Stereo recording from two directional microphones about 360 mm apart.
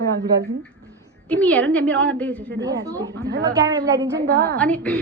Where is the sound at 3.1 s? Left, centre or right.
Right.